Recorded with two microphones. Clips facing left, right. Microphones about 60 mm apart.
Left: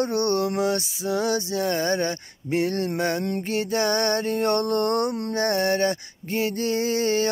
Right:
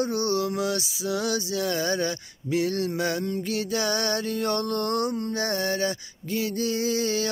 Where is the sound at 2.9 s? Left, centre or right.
Left.